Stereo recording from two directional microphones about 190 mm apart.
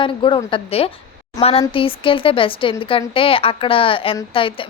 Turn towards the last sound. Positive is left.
turn(degrees=30)  # may be behind; listen again after turning